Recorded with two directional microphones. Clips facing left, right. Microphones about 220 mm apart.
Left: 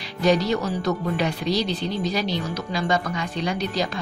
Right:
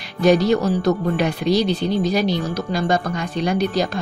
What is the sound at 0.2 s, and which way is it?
Speech, 50° right (ahead or behind).